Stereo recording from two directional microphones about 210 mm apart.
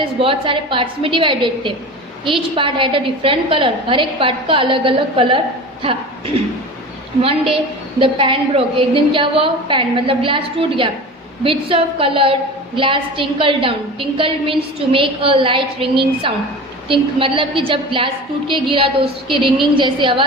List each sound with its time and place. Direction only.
0.2 s a woman's voice: 25° right (ahead or behind)
7.5 s a woman's voice: 25° right (ahead or behind)